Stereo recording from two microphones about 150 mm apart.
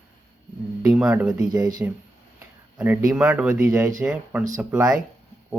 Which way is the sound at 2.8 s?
5° right (ahead or behind).